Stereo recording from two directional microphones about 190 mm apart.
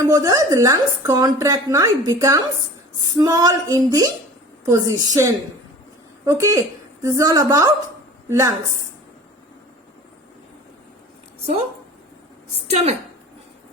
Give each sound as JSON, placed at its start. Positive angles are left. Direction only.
{"t": 0.0, "sound": "a woman's voice", "side_deg": -20}
{"t": 3.2, "sound": "a sound", "side_deg": -20}
{"t": 4.7, "sound": "a woman's voice", "side_deg": -15}
{"t": 12.6, "sound": "a woman's voice", "side_deg": -35}